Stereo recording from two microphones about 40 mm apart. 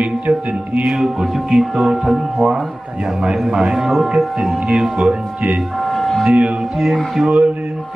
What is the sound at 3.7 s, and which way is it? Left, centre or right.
Speech, centre.